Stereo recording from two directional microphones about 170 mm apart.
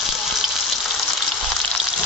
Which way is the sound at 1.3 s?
Centre (ahead or behind).